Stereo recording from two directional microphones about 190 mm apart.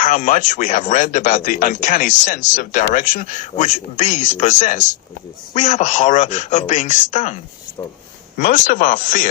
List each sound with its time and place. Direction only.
0.0 s speech: 40° left (ahead or behind)
8.4 s speech: 45° left (ahead or behind)